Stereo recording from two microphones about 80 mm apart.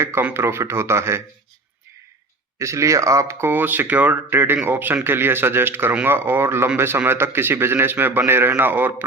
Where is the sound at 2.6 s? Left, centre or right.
Right.